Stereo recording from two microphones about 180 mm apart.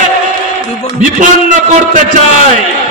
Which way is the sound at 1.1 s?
45° right (ahead or behind).